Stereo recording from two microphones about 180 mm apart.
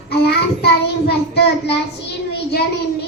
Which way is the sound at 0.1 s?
65° left (ahead or behind).